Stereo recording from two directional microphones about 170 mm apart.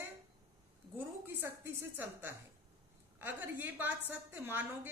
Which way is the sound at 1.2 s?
15° right (ahead or behind).